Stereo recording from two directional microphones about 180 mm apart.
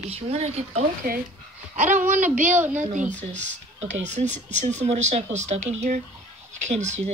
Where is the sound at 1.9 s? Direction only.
45° right (ahead or behind).